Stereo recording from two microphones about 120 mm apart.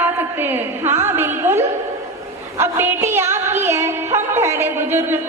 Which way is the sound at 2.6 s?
20° right (ahead or behind).